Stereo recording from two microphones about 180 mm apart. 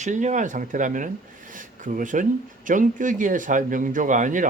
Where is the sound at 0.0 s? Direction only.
40° right (ahead or behind).